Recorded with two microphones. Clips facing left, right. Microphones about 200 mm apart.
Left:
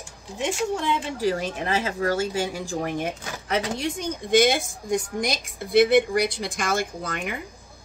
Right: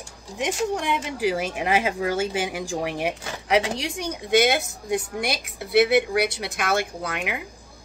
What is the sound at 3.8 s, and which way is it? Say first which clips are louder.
Speech: left 2 dB; 90° right.